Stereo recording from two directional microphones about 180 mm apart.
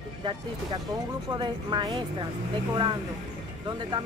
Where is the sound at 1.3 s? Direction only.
25° right (ahead or behind).